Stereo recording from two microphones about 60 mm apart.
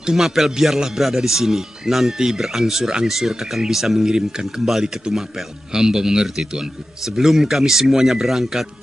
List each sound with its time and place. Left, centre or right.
0.0 s a man's voice: centre